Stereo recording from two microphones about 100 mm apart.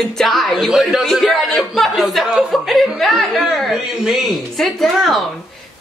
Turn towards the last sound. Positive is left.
turn(degrees=0)  # may be behind; listen again after turning